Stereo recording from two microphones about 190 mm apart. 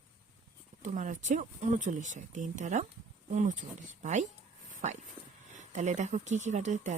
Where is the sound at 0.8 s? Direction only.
40° right (ahead or behind).